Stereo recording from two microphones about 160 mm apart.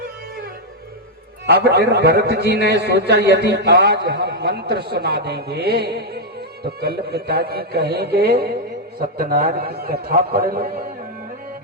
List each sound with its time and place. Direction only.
1.5 s a man's voice: 90° right
9.0 s a man's voice: 65° right (ahead or behind)